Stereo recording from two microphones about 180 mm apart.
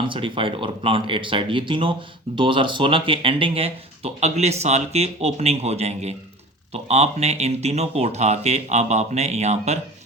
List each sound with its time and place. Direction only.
0.0 s speech: 30° right (ahead or behind)